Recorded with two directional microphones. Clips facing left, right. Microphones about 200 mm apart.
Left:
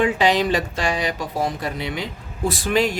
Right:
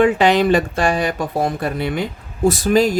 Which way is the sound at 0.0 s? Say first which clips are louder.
Right 5 dB; 55° right (ahead or behind).